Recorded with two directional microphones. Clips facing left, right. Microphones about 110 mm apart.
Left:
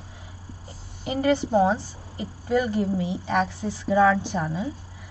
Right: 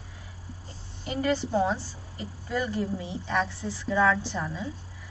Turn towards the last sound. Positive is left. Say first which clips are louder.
# left 5 dB
turn(degrees=20)  # may be behind; listen again after turning